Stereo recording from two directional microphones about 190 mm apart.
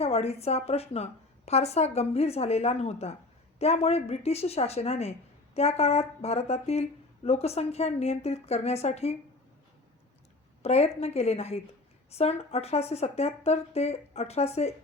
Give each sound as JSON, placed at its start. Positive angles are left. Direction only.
{"t": 0.0, "sound": "a woman's voice", "side_deg": 35}
{"t": 10.6, "sound": "a woman's voice", "side_deg": 35}